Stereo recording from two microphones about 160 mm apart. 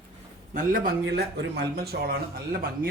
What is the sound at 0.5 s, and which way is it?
Speech, 60° right (ahead or behind).